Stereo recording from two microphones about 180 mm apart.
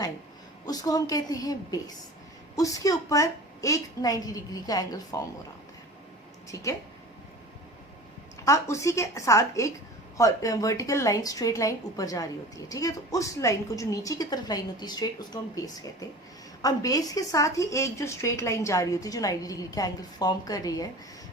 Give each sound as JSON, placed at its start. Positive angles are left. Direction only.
{"t": 0.6, "sound": "speech", "side_deg": 20}
{"t": 6.5, "sound": "a woman's voice", "side_deg": 15}
{"t": 8.4, "sound": "a woman's voice", "side_deg": 15}